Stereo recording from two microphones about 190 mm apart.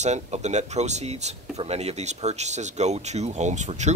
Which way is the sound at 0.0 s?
35° right (ahead or behind).